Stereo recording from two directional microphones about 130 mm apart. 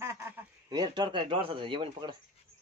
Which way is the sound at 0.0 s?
20° right (ahead or behind).